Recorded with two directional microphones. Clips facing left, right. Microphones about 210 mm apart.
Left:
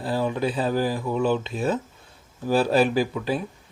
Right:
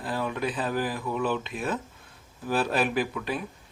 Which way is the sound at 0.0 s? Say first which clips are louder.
Left 5 dB; 30° left (ahead or behind).